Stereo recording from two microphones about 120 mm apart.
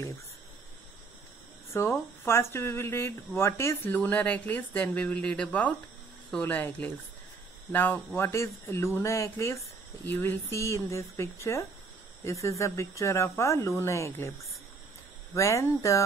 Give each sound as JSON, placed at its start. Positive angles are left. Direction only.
{"t": 1.7, "sound": "speech", "side_deg": 20}
{"t": 15.3, "sound": "speech", "side_deg": 25}